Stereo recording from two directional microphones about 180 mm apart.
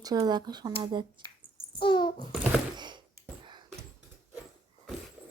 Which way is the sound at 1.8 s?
25° left (ahead or behind).